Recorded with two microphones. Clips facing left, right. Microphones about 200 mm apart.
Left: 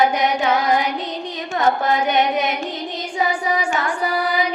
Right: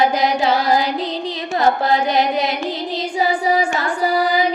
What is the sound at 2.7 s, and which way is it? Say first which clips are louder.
Music: right 4 dB; 35° right (ahead or behind).